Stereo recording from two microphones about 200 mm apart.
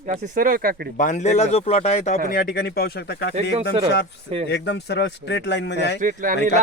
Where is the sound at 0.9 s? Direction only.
40° left (ahead or behind); by 3.3 s 55° left (ahead or behind).